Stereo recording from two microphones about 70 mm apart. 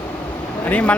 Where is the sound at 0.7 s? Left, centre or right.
Left.